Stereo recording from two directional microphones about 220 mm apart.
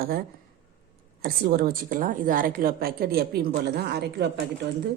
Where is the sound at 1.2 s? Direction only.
40° right (ahead or behind).